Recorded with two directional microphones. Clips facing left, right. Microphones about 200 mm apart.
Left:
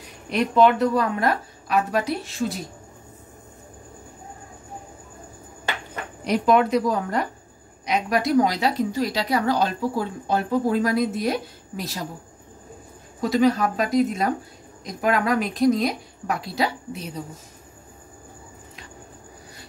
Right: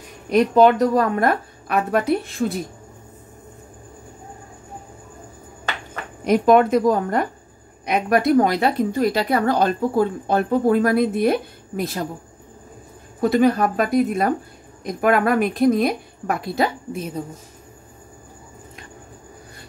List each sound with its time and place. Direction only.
0.3 s a woman's voice: 40° right (ahead or behind)
6.2 s a woman's voice: 50° right (ahead or behind)
13.2 s a woman's voice: 55° right (ahead or behind)